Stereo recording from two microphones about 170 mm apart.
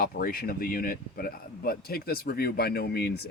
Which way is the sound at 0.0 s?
60° left (ahead or behind).